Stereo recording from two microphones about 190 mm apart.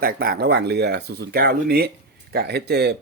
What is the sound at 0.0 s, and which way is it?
Speech, 50° right (ahead or behind).